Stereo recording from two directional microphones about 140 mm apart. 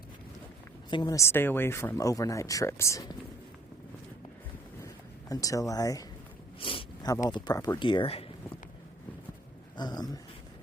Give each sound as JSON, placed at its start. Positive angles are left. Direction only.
{"t": 0.9, "sound": "a woman's voice", "side_deg": 30}
{"t": 1.2, "sound": "speech", "side_deg": 15}
{"t": 5.3, "sound": "speech", "side_deg": 25}
{"t": 6.6, "sound": "speech", "side_deg": 40}
{"t": 9.7, "sound": "speech", "side_deg": 30}